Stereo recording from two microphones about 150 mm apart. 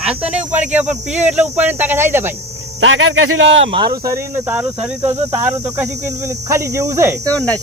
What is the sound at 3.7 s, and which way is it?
Speech, 25° right (ahead or behind).